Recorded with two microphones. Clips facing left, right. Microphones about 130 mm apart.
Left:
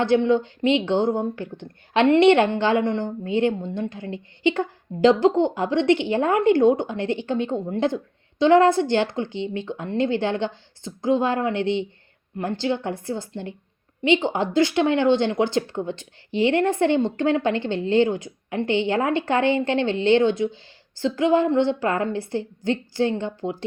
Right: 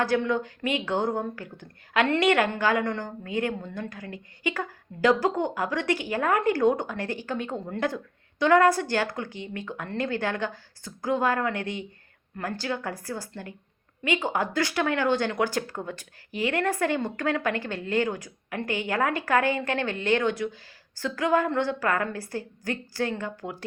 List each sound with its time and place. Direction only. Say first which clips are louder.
0.0 s a woman's voice: left 6 dB; 25° left (ahead or behind)